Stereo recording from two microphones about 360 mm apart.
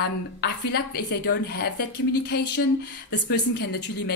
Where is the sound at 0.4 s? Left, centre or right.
Left.